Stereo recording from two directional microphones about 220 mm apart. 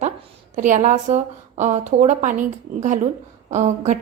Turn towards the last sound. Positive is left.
turn(degrees=-30)  # may be behind; listen again after turning